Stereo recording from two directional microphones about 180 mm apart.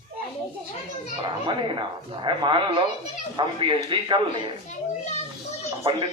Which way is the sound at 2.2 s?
25° right (ahead or behind).